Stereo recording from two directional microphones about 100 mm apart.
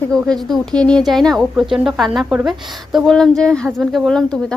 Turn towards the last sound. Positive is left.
turn(degrees=5)  # may be behind; listen again after turning